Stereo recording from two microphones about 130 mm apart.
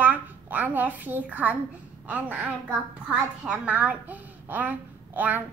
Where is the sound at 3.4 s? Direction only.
10° right (ahead or behind).